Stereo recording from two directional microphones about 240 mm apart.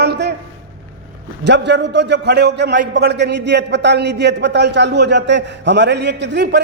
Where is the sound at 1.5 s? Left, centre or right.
Right.